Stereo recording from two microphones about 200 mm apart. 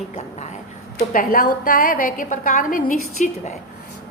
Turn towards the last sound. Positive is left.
turn(degrees=40)  # may be behind; listen again after turning